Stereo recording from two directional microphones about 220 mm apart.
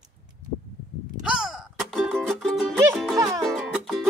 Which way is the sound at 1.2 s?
5° right (ahead or behind).